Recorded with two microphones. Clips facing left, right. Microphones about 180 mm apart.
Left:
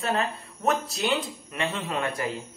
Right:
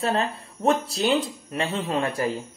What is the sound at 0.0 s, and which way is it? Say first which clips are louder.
Speech: right 3 dB; 30° right (ahead or behind).